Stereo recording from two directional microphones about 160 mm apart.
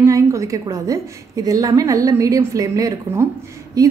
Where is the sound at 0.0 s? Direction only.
20° right (ahead or behind).